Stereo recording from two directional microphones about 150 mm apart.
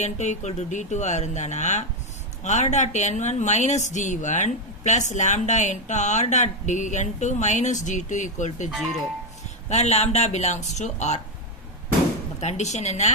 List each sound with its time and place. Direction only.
0.0 s a woman's voice: 50° left (ahead or behind)
12.4 s a woman's voice: 50° left (ahead or behind)